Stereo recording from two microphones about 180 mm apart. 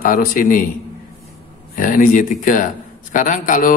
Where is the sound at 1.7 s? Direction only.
50° left (ahead or behind).